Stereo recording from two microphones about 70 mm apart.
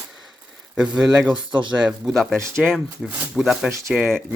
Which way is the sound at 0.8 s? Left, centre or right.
Centre.